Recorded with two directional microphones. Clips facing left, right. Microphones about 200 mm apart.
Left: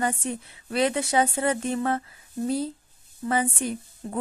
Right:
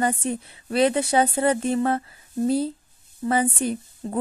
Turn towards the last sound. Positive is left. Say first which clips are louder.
# right 4 dB
turn(degrees=-30)  # may be behind; listen again after turning